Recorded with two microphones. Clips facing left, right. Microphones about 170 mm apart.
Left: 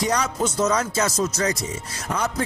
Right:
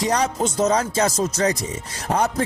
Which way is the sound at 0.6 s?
30° right (ahead or behind).